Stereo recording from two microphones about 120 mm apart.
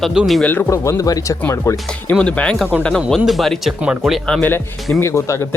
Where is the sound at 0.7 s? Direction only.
25° left (ahead or behind).